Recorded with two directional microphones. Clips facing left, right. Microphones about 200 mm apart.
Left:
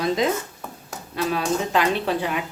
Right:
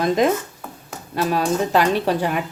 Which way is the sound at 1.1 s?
40° right (ahead or behind).